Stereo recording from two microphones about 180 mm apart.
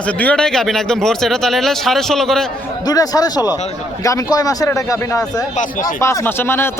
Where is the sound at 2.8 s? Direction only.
20° left (ahead or behind).